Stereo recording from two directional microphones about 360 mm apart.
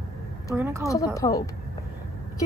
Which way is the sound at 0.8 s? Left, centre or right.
Centre.